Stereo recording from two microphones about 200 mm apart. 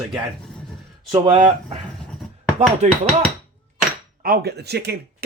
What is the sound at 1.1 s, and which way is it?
Speech, 25° right (ahead or behind).